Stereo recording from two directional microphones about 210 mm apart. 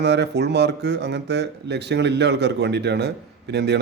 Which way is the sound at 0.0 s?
55° right (ahead or behind).